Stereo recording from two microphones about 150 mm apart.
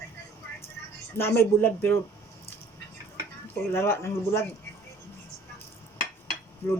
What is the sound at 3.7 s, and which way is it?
Speech, 15° left (ahead or behind).